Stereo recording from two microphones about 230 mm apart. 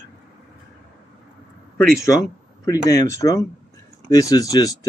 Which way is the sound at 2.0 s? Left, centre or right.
Centre.